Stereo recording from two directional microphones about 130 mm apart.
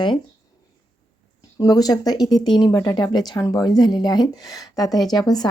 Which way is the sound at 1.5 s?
30° left (ahead or behind).